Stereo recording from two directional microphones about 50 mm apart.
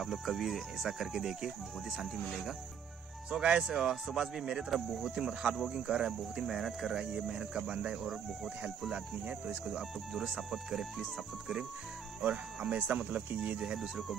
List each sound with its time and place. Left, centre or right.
0.0 s speech: centre
9.7 s speech: centre
12.2 s speech: centre
13.7 s speech: centre